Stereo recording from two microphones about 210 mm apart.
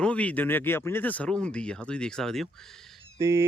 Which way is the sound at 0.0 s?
5° left (ahead or behind).